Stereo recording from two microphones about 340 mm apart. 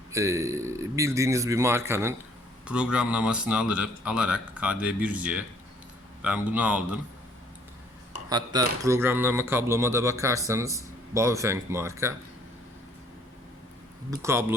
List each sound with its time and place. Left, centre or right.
0.1 s a man's voice: centre
8.1 s speech: centre
14.1 s speech: centre